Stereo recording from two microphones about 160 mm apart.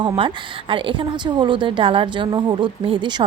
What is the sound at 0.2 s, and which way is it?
A woman's voice, 30° right (ahead or behind).